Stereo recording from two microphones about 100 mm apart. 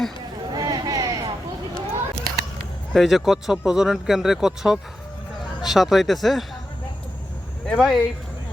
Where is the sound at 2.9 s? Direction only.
Centre (ahead or behind).